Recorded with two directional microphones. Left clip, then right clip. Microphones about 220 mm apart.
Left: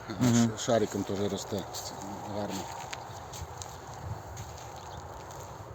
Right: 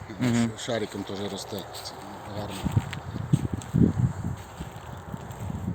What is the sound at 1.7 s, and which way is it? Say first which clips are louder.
Mouse: right 1 dB; 35° left (ahead or behind).